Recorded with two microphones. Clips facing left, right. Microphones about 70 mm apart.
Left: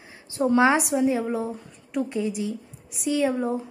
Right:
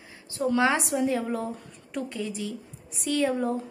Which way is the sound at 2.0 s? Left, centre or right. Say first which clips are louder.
Left 5 dB; left.